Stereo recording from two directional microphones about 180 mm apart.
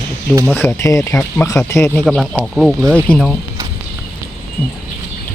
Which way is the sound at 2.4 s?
Centre (ahead or behind).